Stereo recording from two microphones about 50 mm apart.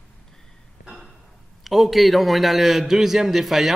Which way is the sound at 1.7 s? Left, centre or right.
Centre.